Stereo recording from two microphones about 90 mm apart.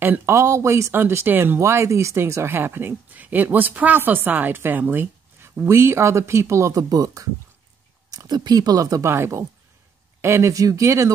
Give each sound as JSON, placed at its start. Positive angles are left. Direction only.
{"t": 0.3, "sound": "speech", "side_deg": -30}